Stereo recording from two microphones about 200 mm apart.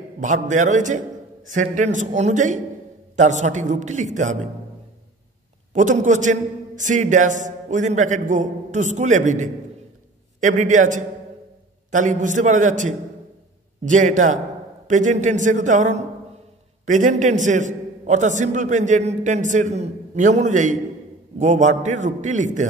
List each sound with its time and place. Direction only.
0.2 s a man's voice: 40° right (ahead or behind)
5.7 s a man's voice: 40° right (ahead or behind)